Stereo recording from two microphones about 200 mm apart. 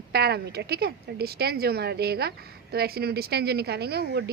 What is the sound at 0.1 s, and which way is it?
A woman's voice, 55° right (ahead or behind).